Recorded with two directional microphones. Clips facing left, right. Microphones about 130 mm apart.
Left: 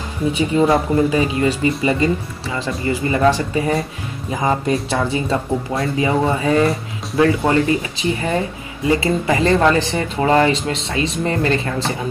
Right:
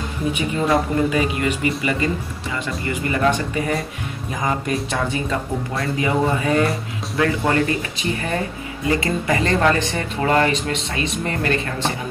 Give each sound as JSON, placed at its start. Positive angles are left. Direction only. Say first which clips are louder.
{"t": 0.6, "sound": "speech", "louder": "left 4 dB", "side_deg": 30}